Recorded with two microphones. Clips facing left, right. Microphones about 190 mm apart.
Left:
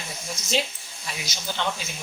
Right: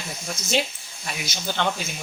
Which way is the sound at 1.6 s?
60° right (ahead or behind).